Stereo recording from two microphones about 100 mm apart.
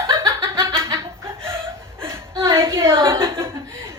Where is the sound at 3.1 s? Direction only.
25° right (ahead or behind).